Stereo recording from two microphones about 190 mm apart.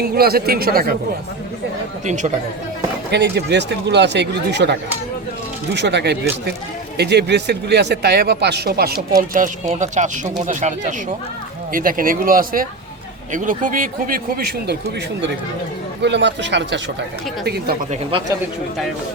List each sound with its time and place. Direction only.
0.0 s speech: 55° right (ahead or behind)
2.0 s speech: 40° right (ahead or behind)
3.1 s a man's voice: 65° right (ahead or behind)
9.3 s speech: 40° right (ahead or behind)
16.0 s speech: 70° right (ahead or behind)
17.4 s a man's voice: 55° right (ahead or behind)